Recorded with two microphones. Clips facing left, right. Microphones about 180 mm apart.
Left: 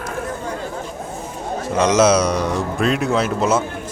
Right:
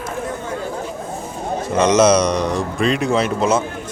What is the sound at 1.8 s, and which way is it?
Speech, 5° left (ahead or behind).